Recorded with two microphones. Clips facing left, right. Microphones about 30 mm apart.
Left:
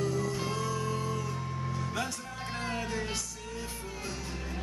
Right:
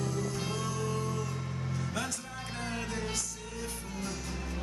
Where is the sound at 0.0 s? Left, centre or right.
Centre.